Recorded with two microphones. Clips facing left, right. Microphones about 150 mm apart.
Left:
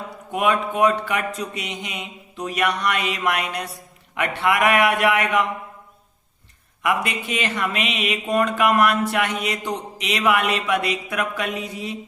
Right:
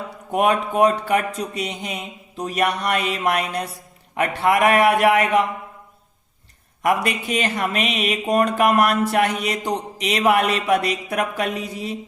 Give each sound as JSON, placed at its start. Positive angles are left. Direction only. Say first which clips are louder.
{"t": 0.3, "sound": "speech", "louder": "right 2 dB", "side_deg": -35}
{"t": 6.8, "sound": "speech", "louder": "right 3 dB", "side_deg": -40}